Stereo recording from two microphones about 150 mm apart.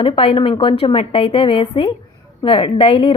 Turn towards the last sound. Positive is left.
turn(degrees=40)  # may be behind; listen again after turning